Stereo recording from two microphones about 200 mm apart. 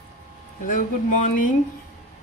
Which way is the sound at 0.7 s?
40° left (ahead or behind).